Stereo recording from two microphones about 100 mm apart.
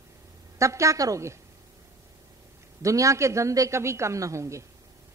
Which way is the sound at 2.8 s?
30° right (ahead or behind).